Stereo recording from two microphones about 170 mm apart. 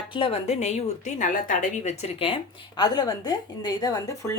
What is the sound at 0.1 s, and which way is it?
A woman's voice, 35° left (ahead or behind).